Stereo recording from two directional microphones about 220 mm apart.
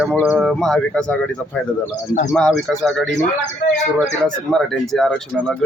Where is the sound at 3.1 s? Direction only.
30° left (ahead or behind).